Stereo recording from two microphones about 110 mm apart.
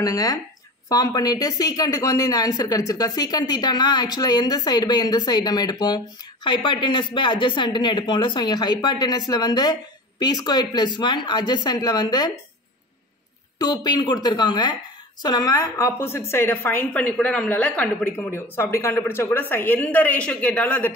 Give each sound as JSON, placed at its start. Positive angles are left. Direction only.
{"t": 0.0, "sound": "speech", "side_deg": 35}
{"t": 13.6, "sound": "speech", "side_deg": 35}
{"t": 15.6, "sound": "a woman's voice", "side_deg": 25}